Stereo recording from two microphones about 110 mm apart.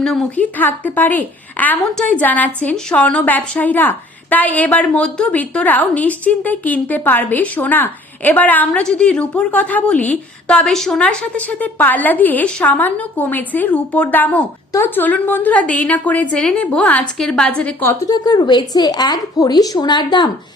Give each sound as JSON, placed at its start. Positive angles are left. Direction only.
{"t": 0.0, "sound": "a woman's voice", "side_deg": 5}
{"t": 0.6, "sound": "a woman's voice", "side_deg": 15}
{"t": 17.6, "sound": "a woman's voice", "side_deg": 15}
{"t": 18.1, "sound": "a woman's voice", "side_deg": 40}